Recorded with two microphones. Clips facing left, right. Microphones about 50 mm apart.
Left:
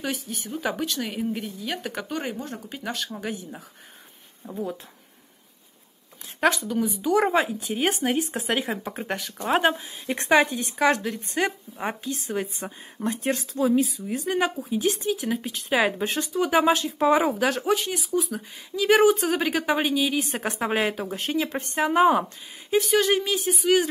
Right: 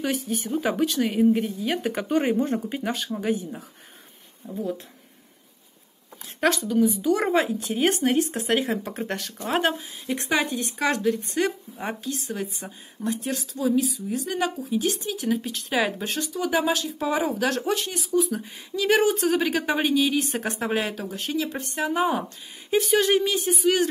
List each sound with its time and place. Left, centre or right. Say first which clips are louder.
0.0 s a woman's voice: right 4 dB; centre
4.4 s speech: right 1 dB; left
6.4 s speech: right 2 dB; centre
12.5 s speech: left 3 dB; left; by 15.9 s centre
16.0 s speech: left 3 dB; left
17.4 s speech: left 1 dB; centre
21.0 s speech: left 1 dB; left
22.7 s speech: even; centre